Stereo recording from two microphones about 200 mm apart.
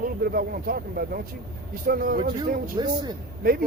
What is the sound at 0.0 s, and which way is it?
Speech, 50° right (ahead or behind).